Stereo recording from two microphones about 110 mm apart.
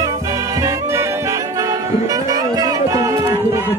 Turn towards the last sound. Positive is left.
turn(degrees=-30)  # may be behind; listen again after turning